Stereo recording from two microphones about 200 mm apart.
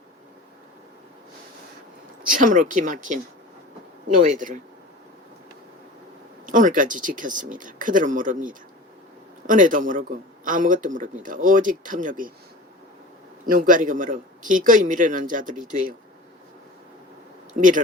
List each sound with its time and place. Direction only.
2.3 s a man's voice: 40° right (ahead or behind)
4.2 s a man's voice: 40° right (ahead or behind)
6.4 s a man's voice: 40° right (ahead or behind)
13.4 s a man's voice: 45° right (ahead or behind)
17.6 s a man's voice: 40° right (ahead or behind)